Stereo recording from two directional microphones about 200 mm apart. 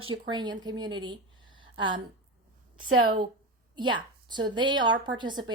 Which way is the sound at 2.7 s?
90° right.